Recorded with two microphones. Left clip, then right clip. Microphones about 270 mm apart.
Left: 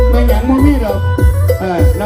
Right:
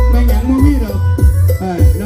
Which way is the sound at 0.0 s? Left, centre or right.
Centre.